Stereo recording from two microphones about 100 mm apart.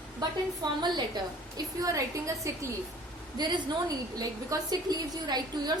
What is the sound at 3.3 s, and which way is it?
A woman's voice, 45° right (ahead or behind).